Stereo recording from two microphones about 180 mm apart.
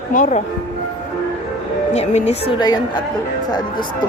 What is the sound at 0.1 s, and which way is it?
Speech, 45° left (ahead or behind).